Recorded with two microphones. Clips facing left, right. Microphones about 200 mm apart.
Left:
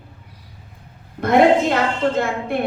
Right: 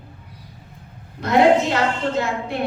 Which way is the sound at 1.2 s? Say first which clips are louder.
Left 1 dB; 50° left (ahead or behind).